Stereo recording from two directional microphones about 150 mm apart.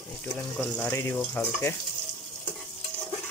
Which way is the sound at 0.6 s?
10° left (ahead or behind).